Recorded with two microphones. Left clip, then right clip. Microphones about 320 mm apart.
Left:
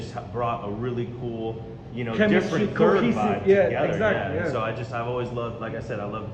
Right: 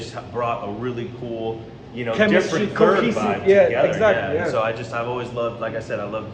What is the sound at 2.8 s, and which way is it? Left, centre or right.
Speech, centre.